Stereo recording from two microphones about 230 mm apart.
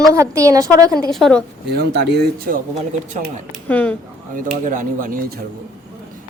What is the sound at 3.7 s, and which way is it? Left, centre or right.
Speech, centre.